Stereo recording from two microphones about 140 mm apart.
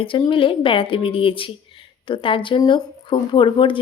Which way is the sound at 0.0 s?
40° left (ahead or behind).